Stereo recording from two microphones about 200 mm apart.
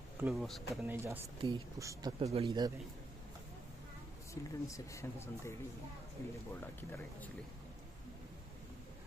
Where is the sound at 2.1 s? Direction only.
30° right (ahead or behind).